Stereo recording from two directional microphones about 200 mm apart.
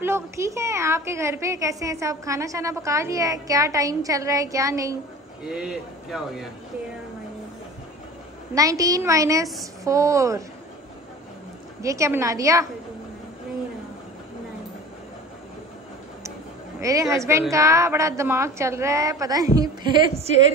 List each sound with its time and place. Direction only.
0.0 s a woman's voice: 15° right (ahead or behind)
5.4 s speech: 5° right (ahead or behind)
8.5 s a woman's voice: 15° right (ahead or behind)
11.8 s a woman's voice: 15° right (ahead or behind)
16.8 s a woman's voice: 15° right (ahead or behind)